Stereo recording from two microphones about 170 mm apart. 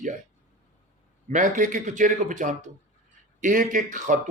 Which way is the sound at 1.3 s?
50° right (ahead or behind).